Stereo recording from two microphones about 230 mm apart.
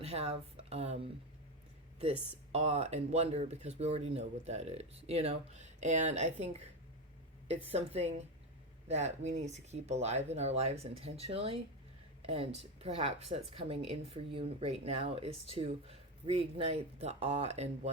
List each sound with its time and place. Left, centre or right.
0.0 s speech: right
2.5 s speech: right
7.7 s speech: right